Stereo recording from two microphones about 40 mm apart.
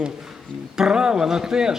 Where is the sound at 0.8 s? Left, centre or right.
Centre.